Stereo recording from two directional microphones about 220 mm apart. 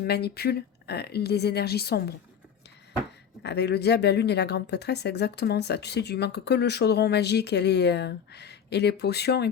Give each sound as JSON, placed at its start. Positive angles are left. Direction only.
{"t": 0.0, "sound": "speech", "side_deg": 45}
{"t": 3.4, "sound": "speech", "side_deg": 50}